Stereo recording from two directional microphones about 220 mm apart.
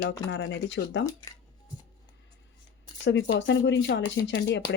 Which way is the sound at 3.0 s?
55° left (ahead or behind).